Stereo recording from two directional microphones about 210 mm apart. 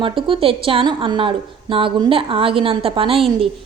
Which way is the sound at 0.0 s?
25° right (ahead or behind).